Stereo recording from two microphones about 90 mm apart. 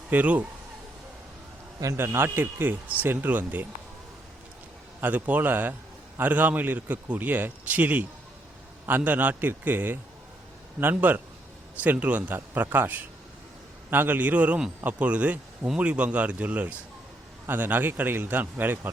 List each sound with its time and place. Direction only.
0.1 s speech: 15° right (ahead or behind)
1.8 s speech: 35° right (ahead or behind)
4.9 s speech: 20° right (ahead or behind)